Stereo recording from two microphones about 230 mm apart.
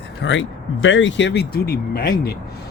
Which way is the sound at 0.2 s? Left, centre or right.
Left.